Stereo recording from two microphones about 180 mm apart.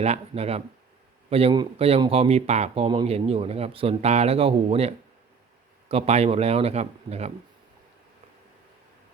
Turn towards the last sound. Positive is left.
turn(degrees=-35)  # may be behind; listen again after turning